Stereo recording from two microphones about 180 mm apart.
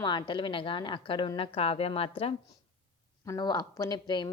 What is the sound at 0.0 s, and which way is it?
A woman's voice, 25° left (ahead or behind).